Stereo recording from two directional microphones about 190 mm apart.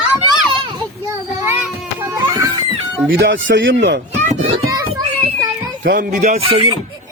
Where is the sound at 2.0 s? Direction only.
15° right (ahead or behind).